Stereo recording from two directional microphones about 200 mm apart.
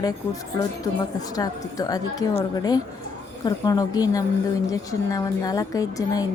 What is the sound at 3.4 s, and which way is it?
A woman's voice, 20° left (ahead or behind).